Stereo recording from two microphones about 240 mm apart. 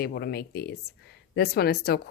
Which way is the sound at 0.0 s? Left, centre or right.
Left.